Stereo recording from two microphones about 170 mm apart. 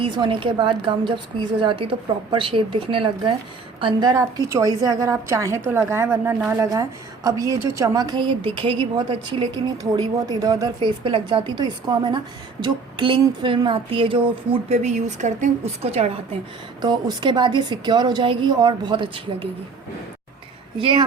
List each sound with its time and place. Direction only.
0.0 s a woman's voice: 30° right (ahead or behind)
16.8 s a woman's voice: 25° right (ahead or behind)
20.7 s a woman's voice: 30° right (ahead or behind)